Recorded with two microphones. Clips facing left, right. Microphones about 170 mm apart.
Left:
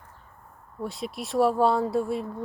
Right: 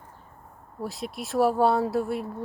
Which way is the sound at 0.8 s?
Centre (ahead or behind).